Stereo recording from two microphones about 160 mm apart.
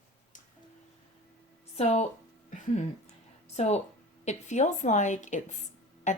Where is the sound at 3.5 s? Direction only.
45° left (ahead or behind).